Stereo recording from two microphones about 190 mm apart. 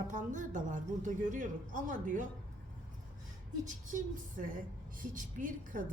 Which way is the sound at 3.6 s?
45° right (ahead or behind).